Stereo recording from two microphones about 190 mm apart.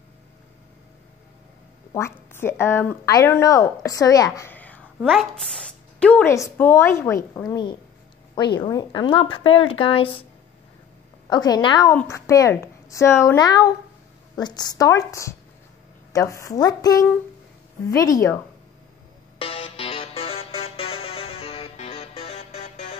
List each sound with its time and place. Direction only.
2.0 s a woman's voice: 15° left (ahead or behind); by 10.2 s 30° left (ahead or behind)
11.2 s a woman's voice: 20° left (ahead or behind)
19.3 s music: 30° left (ahead or behind)